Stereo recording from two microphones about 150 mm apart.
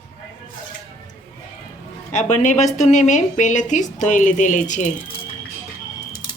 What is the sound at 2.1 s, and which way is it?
A woman's voice, 55° left (ahead or behind).